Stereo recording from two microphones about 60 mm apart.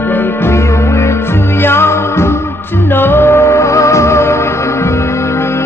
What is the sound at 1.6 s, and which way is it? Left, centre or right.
Music, left.